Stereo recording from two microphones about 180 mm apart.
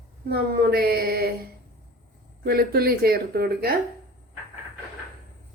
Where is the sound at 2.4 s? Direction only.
55° right (ahead or behind).